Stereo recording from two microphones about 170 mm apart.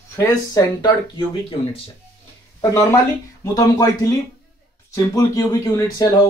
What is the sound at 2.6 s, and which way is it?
Speech, 15° left (ahead or behind).